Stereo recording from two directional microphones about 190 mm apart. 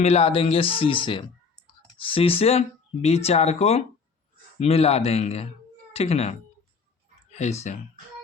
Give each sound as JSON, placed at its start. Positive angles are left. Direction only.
{"t": 0.0, "sound": "speech", "side_deg": 30}
{"t": 7.3, "sound": "clicking", "side_deg": 35}